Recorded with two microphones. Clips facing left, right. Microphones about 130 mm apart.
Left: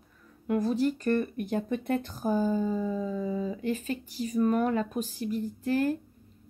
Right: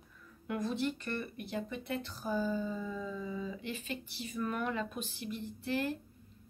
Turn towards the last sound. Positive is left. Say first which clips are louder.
# left 8 dB
turn(degrees=45)  # may be behind; listen again after turning